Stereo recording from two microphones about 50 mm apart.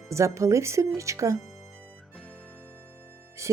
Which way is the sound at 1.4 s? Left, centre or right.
Centre.